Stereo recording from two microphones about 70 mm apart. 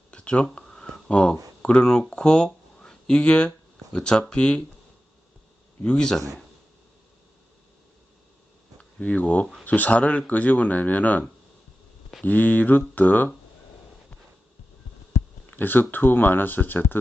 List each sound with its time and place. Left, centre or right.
0.1 s a sound: centre
1.6 s speech: centre
5.8 s a man's voice: centre
8.8 s speech: centre
15.4 s speech: left